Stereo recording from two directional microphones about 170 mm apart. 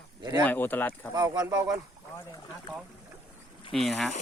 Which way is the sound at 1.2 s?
20° right (ahead or behind).